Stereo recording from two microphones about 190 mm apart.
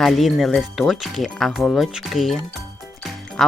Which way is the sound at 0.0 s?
Centre (ahead or behind).